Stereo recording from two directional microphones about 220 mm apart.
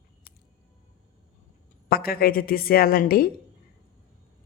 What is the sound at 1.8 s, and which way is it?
Speech, 45° left (ahead or behind).